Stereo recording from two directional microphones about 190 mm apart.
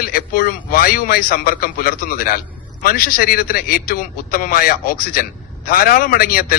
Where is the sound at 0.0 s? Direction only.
50° left (ahead or behind).